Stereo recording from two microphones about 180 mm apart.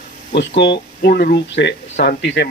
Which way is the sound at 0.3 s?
75° left (ahead or behind).